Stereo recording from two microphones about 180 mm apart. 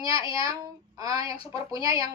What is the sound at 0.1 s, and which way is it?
Speech, 30° left (ahead or behind).